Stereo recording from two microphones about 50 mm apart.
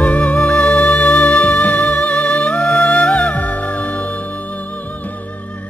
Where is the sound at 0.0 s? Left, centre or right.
Left.